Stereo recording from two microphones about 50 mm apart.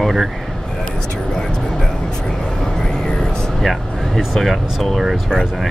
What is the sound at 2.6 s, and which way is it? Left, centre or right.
Vehicle, centre.